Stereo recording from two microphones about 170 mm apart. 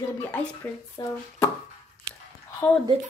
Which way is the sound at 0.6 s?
10° left (ahead or behind).